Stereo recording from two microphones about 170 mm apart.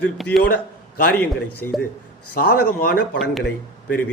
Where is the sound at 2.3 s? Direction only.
65° left (ahead or behind).